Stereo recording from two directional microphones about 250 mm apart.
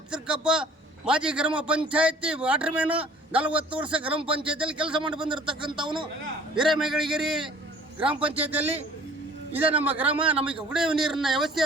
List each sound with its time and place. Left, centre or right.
0.1 s a man's voice: centre
4.1 s speech: right
4.5 s a man's voice: centre
5.2 s speech: centre
6.6 s a man's voice: centre
8.1 s speech: right
8.4 s a man's voice: centre